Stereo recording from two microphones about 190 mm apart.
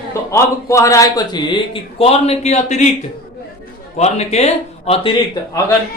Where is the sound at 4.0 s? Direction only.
35° left (ahead or behind).